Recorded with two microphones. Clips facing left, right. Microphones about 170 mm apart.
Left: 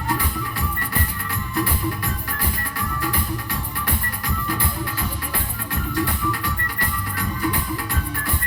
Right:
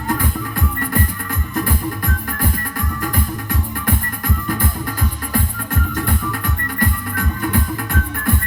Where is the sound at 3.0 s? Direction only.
45° right (ahead or behind).